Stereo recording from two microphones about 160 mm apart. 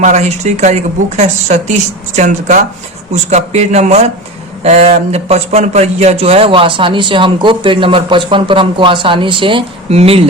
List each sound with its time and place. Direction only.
0.0 s a woman's voice: 50° right (ahead or behind)